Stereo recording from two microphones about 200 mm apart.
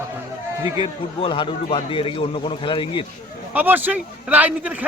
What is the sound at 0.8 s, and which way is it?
A man's voice, 25° left (ahead or behind).